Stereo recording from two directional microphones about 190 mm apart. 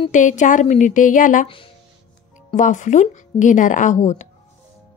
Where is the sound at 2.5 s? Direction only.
40° left (ahead or behind).